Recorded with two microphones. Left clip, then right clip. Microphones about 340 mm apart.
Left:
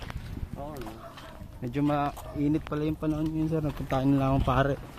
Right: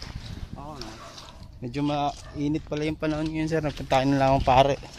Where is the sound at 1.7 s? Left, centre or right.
Centre.